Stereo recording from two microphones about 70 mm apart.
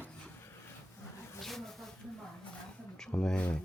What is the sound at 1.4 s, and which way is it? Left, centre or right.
Snake, centre.